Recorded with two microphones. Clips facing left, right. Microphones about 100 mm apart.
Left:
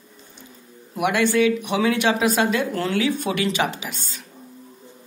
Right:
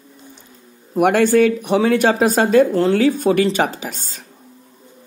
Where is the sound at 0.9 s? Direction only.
45° right (ahead or behind).